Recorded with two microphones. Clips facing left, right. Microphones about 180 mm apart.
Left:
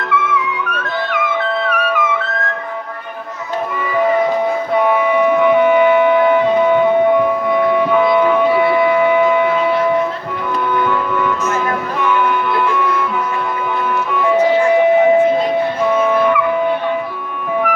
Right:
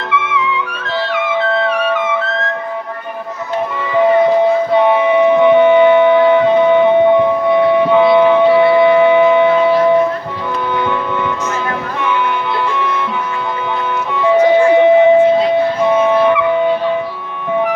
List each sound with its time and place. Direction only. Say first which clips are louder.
1.6 s trumpet: right 2 dB; 25° right (ahead or behind)
4.7 s music: right 3 dB; 25° right (ahead or behind)
10.8 s music: left 1 dB; 20° right (ahead or behind)
14.2 s music: right 4 dB; 25° right (ahead or behind)